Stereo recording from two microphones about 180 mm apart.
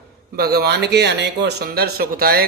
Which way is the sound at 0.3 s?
60° right (ahead or behind).